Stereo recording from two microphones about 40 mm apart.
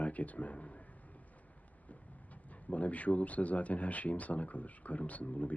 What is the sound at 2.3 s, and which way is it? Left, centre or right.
Speech, left.